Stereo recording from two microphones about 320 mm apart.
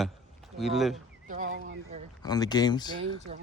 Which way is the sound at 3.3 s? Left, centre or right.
Right.